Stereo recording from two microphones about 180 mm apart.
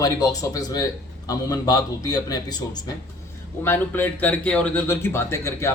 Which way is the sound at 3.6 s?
10° left (ahead or behind).